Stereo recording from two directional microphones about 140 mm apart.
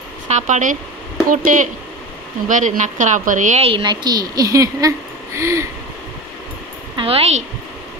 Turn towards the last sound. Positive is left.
turn(degrees=-50)  # may be behind; listen again after turning